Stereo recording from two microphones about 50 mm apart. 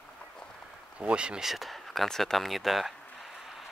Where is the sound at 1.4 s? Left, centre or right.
Centre.